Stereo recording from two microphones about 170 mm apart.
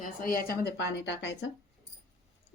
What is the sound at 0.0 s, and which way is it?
Speech, 55° left (ahead or behind).